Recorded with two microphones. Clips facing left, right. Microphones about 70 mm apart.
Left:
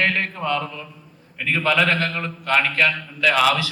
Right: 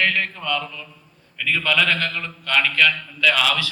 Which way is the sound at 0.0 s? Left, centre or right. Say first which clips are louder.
Left 1 dB; left.